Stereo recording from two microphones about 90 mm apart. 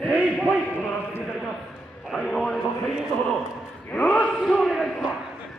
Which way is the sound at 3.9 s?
15° left (ahead or behind).